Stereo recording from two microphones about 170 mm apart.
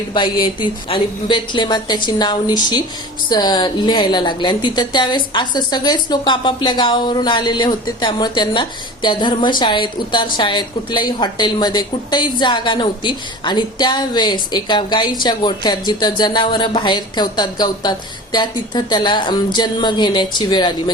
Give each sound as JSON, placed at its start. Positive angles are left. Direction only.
{"t": 0.1, "sound": "a woman's voice", "side_deg": 25}